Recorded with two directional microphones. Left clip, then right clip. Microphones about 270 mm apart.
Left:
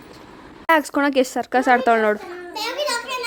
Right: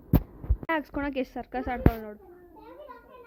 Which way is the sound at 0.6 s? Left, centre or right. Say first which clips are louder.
Left 13 dB; centre.